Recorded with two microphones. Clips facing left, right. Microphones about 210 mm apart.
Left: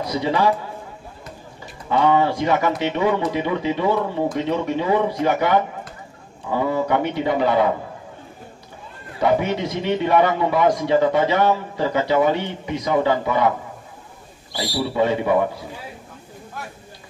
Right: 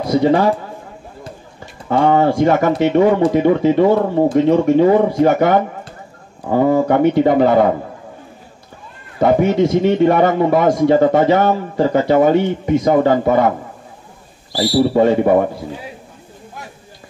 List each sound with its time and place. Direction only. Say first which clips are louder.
0.0 s a man's voice: right 7 dB; 50° right (ahead or behind)
1.9 s speech: right 4 dB; 50° right (ahead or behind)
9.2 s speech: right 7 dB; 45° right (ahead or behind)
14.6 s speech: right 8 dB; 50° right (ahead or behind)